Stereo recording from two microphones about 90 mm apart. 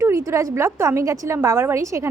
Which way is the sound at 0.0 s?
35° right (ahead or behind).